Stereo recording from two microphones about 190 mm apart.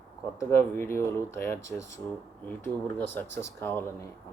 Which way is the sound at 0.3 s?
15° left (ahead or behind).